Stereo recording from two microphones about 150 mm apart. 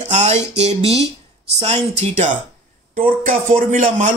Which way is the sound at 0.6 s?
40° right (ahead or behind).